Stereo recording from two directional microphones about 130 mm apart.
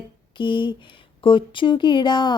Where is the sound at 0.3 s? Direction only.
40° left (ahead or behind).